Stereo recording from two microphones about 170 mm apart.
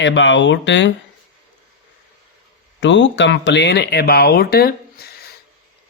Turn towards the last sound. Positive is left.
turn(degrees=65)  # may be behind; listen again after turning